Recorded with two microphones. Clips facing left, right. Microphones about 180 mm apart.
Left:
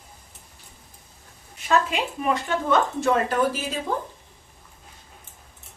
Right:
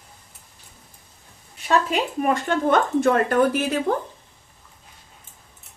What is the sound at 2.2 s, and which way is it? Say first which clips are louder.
Speech: right 3 dB; 45° right (ahead or behind).